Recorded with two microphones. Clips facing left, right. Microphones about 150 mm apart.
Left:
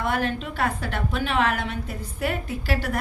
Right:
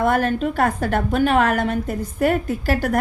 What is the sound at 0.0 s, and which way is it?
A woman's voice, 45° right (ahead or behind).